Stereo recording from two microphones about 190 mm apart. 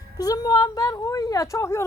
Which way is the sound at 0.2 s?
20° left (ahead or behind).